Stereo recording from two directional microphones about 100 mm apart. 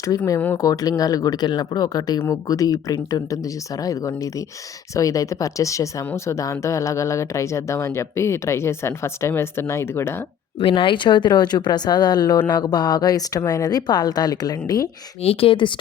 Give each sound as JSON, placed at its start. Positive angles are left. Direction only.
{"t": 0.5, "sound": "a woman's voice", "side_deg": 35}
{"t": 10.6, "sound": "a woman's voice", "side_deg": 60}
{"t": 15.2, "sound": "speech", "side_deg": 75}